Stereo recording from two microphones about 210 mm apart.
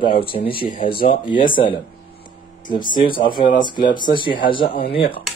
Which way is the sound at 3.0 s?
25° left (ahead or behind).